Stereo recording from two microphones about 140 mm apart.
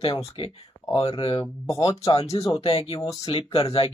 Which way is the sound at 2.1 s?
45° left (ahead or behind).